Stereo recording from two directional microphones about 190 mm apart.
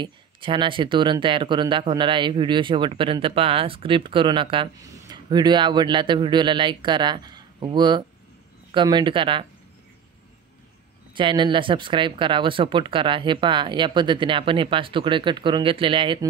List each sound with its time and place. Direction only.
0.0 s speech: 25° right (ahead or behind)
11.1 s speech: 25° right (ahead or behind)